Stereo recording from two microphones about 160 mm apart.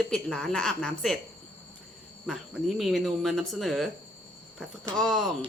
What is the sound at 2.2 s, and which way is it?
A woman's voice, centre (ahead or behind).